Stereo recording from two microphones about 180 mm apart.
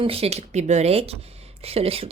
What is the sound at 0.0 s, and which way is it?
Speech, 35° right (ahead or behind).